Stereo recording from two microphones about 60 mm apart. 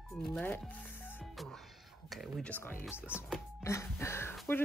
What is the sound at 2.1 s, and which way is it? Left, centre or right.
Speech, centre.